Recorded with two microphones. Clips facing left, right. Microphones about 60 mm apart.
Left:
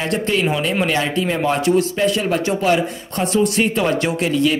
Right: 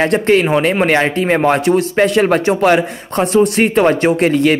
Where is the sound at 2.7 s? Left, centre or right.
Right.